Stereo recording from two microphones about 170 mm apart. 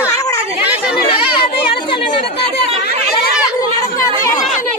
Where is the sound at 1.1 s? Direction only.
30° left (ahead or behind).